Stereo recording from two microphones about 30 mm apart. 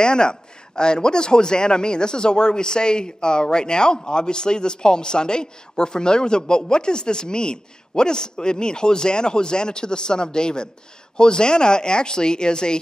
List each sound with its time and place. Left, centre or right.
0.0 s a man's voice: left